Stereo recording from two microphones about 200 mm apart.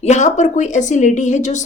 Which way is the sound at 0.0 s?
35° left (ahead or behind).